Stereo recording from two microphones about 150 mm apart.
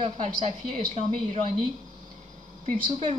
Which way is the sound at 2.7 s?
35° right (ahead or behind).